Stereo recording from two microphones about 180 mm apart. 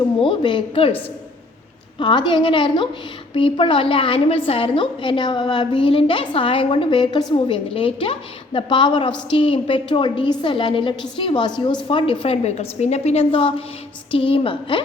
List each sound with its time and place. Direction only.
0.2 s a woman's voice: 30° left (ahead or behind)
2.0 s a woman's voice: 25° left (ahead or behind)